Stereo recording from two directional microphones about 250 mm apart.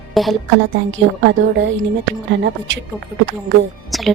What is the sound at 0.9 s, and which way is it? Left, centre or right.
Speech, right.